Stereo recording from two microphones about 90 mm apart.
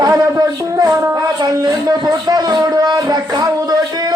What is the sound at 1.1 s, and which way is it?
Speech, 45° right (ahead or behind).